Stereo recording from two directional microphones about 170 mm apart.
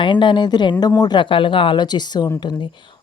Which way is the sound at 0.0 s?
30° left (ahead or behind).